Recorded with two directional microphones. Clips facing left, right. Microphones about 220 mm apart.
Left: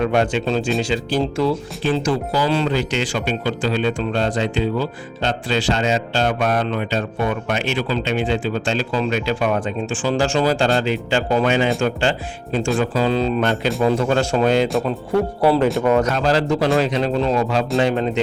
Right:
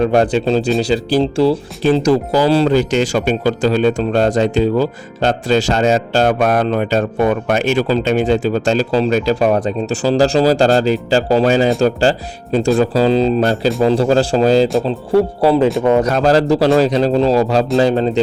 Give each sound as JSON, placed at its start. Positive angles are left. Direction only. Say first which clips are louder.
{"t": 0.0, "sound": "speech", "louder": "right 5 dB", "side_deg": -35}
{"t": 16.0, "sound": "speech", "louder": "right 6 dB", "side_deg": -40}